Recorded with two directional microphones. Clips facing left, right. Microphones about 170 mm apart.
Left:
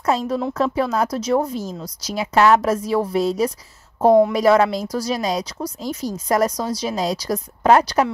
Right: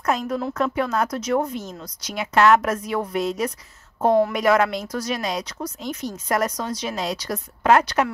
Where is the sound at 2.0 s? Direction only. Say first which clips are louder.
Left 2 dB; 35° left (ahead or behind).